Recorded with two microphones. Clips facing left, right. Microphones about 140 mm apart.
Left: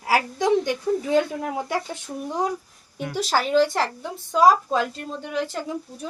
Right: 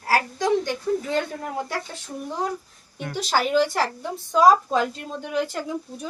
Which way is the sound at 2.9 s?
5° left (ahead or behind).